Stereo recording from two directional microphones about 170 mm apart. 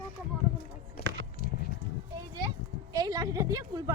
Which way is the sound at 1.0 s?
60° left (ahead or behind).